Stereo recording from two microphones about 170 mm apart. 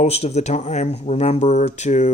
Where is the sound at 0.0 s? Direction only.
40° left (ahead or behind).